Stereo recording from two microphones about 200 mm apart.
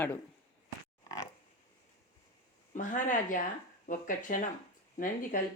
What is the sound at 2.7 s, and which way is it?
Speech, 40° left (ahead or behind).